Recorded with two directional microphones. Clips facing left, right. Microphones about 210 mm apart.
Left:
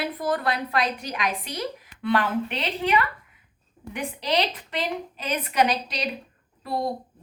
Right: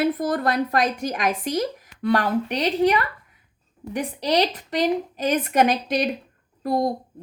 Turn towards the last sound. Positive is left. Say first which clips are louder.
# right 6 dB
turn(degrees=-45)  # may be behind; listen again after turning